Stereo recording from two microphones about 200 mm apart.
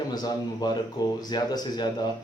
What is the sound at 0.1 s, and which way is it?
A man's voice, 20° left (ahead or behind).